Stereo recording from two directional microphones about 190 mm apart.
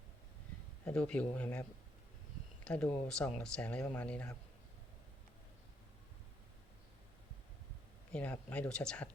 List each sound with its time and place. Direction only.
0.9 s speech: 5° left (ahead or behind)
2.6 s speech: 5° left (ahead or behind)
8.1 s speech: 10° left (ahead or behind)